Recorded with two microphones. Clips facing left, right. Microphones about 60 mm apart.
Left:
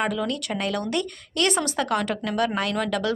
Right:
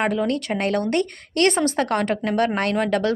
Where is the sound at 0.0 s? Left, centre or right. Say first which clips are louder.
Right 4 dB; right.